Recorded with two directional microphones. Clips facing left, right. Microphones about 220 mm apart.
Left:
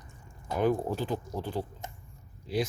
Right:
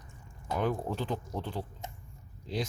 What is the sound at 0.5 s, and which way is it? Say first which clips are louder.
Speech: left 4 dB; 5° left (ahead or behind).